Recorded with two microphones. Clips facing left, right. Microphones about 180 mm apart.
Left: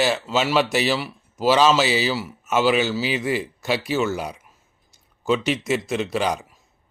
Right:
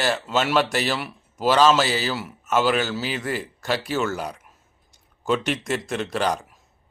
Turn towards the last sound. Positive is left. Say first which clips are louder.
# left 1 dB
turn(degrees=5)  # may be behind; listen again after turning